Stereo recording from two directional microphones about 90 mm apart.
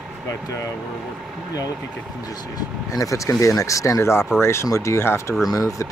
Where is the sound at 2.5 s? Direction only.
40° left (ahead or behind).